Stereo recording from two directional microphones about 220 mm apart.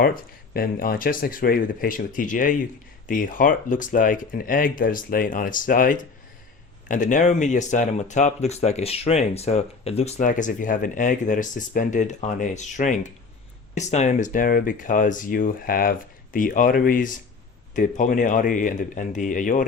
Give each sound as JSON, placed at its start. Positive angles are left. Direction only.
{"t": 0.5, "sound": "speech", "side_deg": 40}